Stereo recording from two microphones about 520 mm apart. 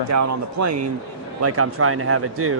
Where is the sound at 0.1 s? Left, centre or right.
Right.